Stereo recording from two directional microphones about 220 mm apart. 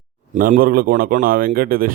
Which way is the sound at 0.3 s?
35° right (ahead or behind).